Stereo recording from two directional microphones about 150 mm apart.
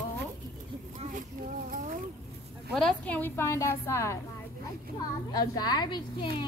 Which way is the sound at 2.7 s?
5° left (ahead or behind).